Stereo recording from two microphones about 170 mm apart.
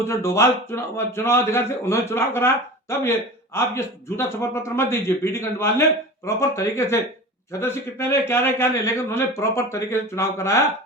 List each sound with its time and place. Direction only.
0.0 s a man's voice: 15° left (ahead or behind)